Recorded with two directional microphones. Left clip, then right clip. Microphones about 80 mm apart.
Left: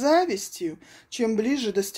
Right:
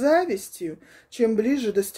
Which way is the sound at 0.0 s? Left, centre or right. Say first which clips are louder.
Right 1 dB; right.